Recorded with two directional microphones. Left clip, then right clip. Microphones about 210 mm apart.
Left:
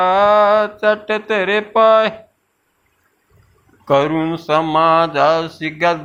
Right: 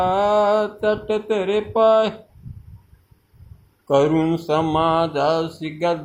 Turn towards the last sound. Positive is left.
turn(degrees=10)  # may be behind; listen again after turning